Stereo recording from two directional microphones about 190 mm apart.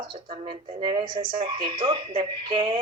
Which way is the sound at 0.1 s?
25° right (ahead or behind).